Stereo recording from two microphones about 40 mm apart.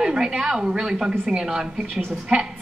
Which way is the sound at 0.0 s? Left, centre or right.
Centre.